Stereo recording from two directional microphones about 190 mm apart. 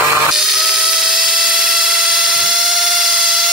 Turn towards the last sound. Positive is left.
turn(degrees=0)  # may be behind; listen again after turning